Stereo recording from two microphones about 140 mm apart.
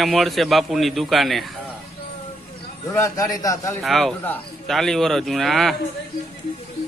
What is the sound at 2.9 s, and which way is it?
Speech, 25° left (ahead or behind).